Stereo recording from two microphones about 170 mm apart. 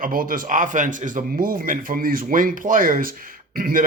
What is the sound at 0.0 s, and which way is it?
Speech, 55° right (ahead or behind).